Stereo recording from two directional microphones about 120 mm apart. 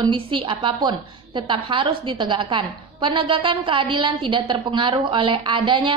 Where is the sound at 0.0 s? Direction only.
45° right (ahead or behind).